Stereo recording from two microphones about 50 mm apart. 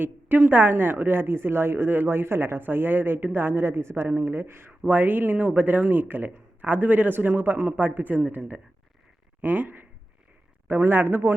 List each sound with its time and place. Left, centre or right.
0.0 s speech: right
3.5 s speech: right
4.9 s speech: right
9.4 s speech: right